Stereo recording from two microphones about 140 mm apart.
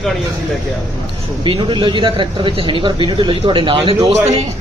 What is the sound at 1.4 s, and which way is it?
A man's voice, 40° right (ahead or behind).